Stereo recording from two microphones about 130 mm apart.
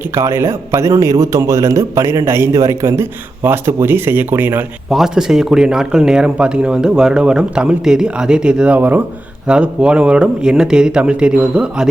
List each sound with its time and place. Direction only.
0.1 s a man's voice: 20° right (ahead or behind)
4.9 s speech: centre (ahead or behind)